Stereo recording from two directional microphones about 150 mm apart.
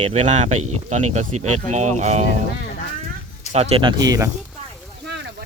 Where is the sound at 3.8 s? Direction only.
25° right (ahead or behind).